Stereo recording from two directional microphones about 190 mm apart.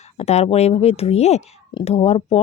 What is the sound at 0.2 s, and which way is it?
Speech, 35° left (ahead or behind).